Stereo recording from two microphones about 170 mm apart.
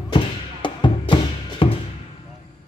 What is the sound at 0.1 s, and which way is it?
Music, 30° left (ahead or behind).